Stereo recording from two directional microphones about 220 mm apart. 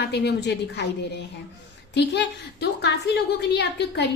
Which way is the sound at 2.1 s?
50° left (ahead or behind).